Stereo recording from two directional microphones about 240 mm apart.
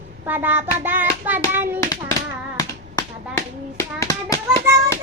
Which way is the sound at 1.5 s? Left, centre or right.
Centre.